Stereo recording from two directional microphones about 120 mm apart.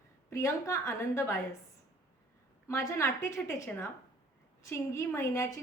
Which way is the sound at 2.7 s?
25° left (ahead or behind).